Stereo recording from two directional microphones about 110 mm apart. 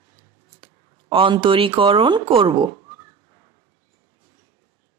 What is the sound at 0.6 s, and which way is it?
Speech, 55° right (ahead or behind).